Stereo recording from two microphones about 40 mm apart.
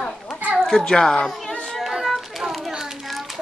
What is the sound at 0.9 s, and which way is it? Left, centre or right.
Speech, centre.